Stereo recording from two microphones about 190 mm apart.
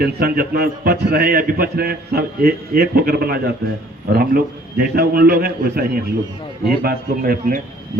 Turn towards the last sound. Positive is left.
turn(degrees=-50)  # may be behind; listen again after turning